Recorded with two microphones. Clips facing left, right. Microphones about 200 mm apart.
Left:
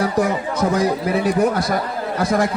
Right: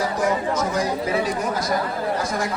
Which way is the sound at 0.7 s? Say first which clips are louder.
Left 4 dB; 60° left (ahead or behind).